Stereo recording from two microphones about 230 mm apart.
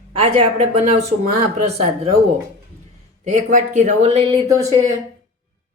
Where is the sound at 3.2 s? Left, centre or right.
Right.